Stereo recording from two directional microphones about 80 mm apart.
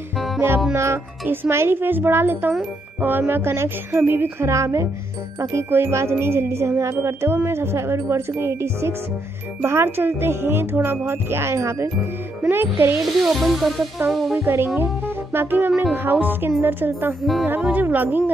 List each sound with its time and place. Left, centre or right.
0.7 s music: right
1.2 s speech: right
5.4 s music: right
9.6 s speech: right
13.2 s music: centre
14.4 s music: right
15.9 s speech: right